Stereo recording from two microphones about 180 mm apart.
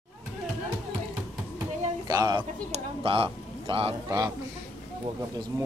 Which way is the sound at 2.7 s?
30° right (ahead or behind).